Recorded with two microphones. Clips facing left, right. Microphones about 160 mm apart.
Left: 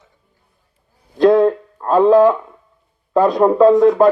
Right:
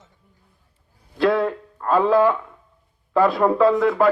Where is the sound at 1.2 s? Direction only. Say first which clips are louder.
Left 8 dB; 40° left (ahead or behind).